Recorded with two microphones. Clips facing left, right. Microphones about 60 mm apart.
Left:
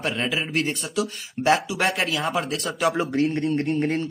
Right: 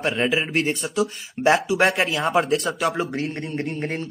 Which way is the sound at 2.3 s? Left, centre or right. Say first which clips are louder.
Right 5 dB; right.